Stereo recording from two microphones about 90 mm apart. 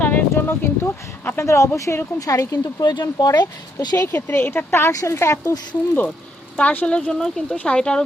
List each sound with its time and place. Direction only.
0.0 s speech: 20° left (ahead or behind); by 2.6 s 40° left (ahead or behind)
2.8 s speech: 50° left (ahead or behind)
4.0 s a woman's voice: 25° left (ahead or behind)
4.9 s speech: 35° left (ahead or behind)
6.6 s speech: 15° left (ahead or behind)